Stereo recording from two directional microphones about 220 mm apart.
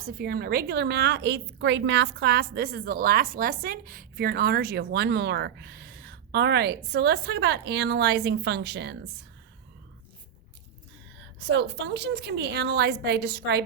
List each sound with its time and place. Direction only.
0.0 s a woman's voice: 45° right (ahead or behind)
11.4 s a woman's voice: 55° right (ahead or behind)